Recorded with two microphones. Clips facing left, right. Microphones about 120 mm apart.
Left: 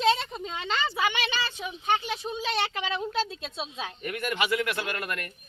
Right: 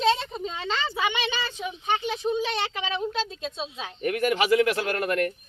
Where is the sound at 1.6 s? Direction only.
5° left (ahead or behind).